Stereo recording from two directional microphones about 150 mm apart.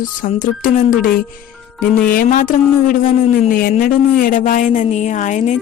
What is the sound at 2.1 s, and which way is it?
A woman's voice, 70° left (ahead or behind).